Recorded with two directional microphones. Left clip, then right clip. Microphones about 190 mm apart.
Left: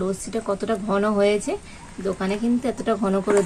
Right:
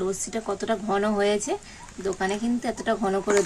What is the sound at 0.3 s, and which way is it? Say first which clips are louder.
A woman's voice: left 3 dB; 25° right (ahead or behind).